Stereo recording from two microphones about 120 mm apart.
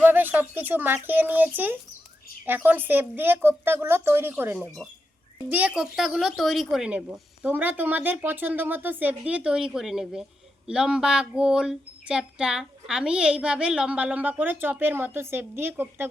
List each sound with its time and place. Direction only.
0.0 s speech: 15° right (ahead or behind)